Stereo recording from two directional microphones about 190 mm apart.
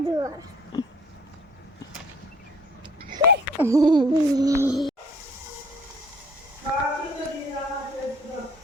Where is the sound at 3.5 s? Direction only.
15° right (ahead or behind).